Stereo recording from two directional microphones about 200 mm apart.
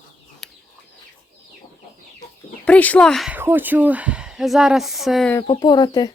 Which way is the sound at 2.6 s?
10° left (ahead or behind).